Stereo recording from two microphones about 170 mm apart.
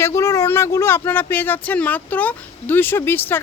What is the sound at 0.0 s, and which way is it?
Speech, 15° left (ahead or behind).